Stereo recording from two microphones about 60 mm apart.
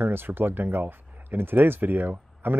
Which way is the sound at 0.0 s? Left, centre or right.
Right.